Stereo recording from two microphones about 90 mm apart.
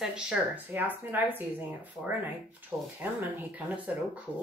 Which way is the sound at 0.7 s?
20° right (ahead or behind).